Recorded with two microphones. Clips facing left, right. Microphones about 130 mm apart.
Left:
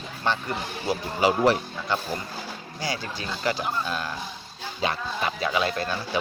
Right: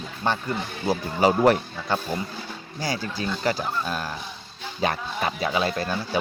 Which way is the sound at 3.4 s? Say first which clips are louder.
Left 1 dB; 40° right (ahead or behind).